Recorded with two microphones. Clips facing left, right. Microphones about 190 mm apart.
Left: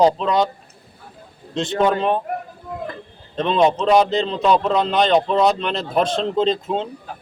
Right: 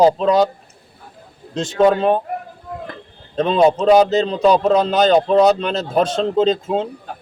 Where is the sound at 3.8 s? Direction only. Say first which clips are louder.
Right 4 dB; 35° right (ahead or behind).